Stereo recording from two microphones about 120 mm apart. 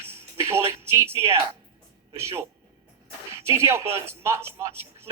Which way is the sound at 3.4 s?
20° right (ahead or behind).